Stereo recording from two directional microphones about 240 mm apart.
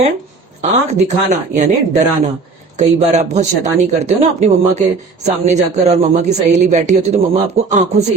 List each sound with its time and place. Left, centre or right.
0.6 s speech: right